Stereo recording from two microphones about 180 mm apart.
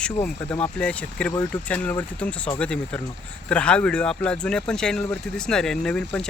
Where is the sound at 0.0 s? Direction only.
10° left (ahead or behind).